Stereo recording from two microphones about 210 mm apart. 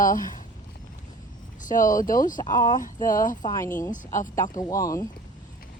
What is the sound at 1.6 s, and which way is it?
Speech, 40° left (ahead or behind).